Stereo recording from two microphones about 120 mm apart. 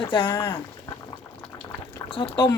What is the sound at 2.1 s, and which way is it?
Speech, 45° left (ahead or behind).